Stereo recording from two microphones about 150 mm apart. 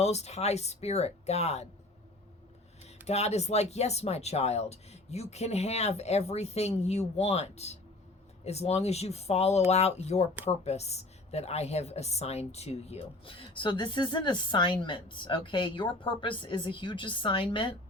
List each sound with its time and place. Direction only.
0.0 s speech: 45° left (ahead or behind)
3.1 s a woman's voice: 45° left (ahead or behind)